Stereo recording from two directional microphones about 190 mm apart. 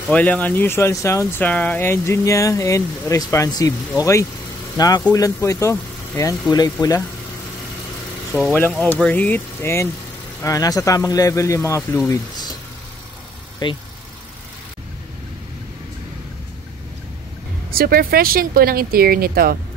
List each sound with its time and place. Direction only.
0.1 s speech: 10° left (ahead or behind)
8.3 s speech: 15° left (ahead or behind)
13.6 s speech: 25° left (ahead or behind)
17.6 s speech: 50° right (ahead or behind)